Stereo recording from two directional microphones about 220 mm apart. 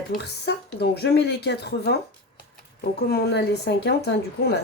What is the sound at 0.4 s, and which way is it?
Speech, 45° left (ahead or behind).